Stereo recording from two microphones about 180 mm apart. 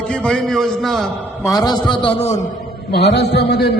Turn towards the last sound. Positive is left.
turn(degrees=65)  # may be behind; listen again after turning